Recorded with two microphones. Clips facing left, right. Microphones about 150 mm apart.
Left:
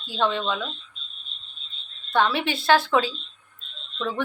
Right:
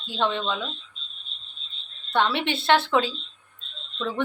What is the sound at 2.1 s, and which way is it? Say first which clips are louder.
Speech: left 1 dB; 25° right (ahead or behind).